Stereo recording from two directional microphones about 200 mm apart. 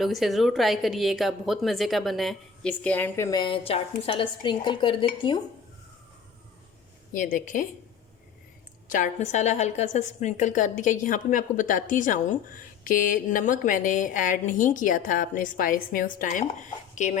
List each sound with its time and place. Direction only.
0.0 s a woman's voice: centre (ahead or behind); by 5.4 s 25° left (ahead or behind)
7.1 s a woman's voice: 40° left (ahead or behind)
8.9 s a woman's voice: 40° left (ahead or behind)